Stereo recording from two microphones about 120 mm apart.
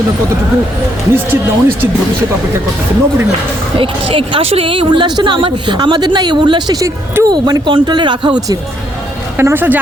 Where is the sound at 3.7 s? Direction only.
50° right (ahead or behind).